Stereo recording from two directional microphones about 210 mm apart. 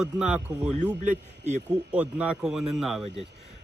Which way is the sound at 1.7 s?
5° right (ahead or behind).